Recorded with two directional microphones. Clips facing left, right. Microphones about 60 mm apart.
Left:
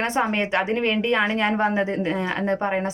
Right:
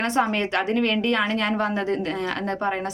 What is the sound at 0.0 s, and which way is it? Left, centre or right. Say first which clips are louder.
A woman's voice: even; left.